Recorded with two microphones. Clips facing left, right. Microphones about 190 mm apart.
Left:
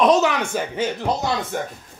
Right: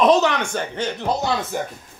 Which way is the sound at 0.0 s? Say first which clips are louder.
Right 1 dB; centre (ahead or behind).